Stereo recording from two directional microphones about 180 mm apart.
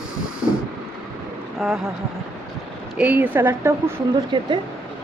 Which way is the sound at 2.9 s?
10° right (ahead or behind).